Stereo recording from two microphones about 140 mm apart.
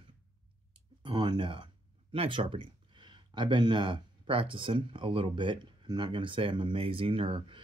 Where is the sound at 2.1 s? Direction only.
40° right (ahead or behind).